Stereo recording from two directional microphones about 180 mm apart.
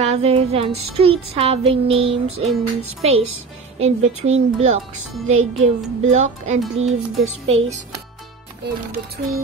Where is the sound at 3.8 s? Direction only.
35° right (ahead or behind).